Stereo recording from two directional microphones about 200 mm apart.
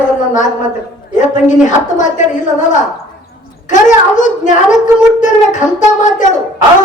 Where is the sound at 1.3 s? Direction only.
40° left (ahead or behind).